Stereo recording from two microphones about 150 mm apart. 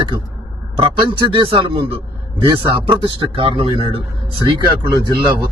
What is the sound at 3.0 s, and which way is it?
Speech, 30° right (ahead or behind).